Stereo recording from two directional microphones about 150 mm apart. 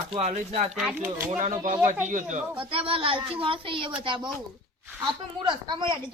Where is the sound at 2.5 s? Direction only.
35° right (ahead or behind).